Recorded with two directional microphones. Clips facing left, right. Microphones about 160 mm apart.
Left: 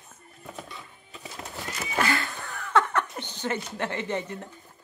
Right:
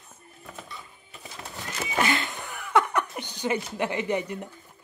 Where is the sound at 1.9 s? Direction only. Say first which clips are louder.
Right 1 dB; 20° right (ahead or behind).